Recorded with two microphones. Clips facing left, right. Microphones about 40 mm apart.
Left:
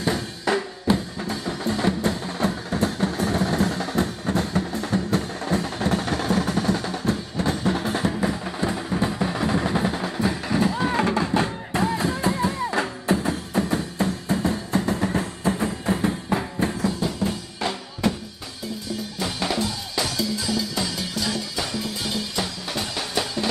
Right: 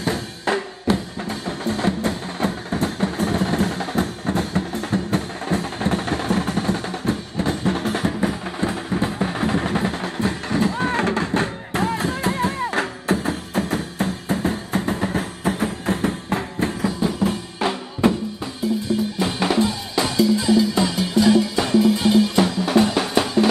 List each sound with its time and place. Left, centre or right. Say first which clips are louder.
0.0 s drum: right 1 dB; right
1.2 s music: right 1 dB; right
3.0 s vehicle: right 1 dB; right
3.3 s a sound: even; right
5.1 s music: right 1 dB; right
7.8 s music: right 2 dB; right
8.2 s music: right 2 dB; right
9.0 s music: right 1 dB; right
13.2 s music: right 1 dB; right
14.5 s music: even; right
15.4 s music: right 2 dB; right
16.8 s music: right 3 dB; centre
19.1 s drum: right 3 dB; right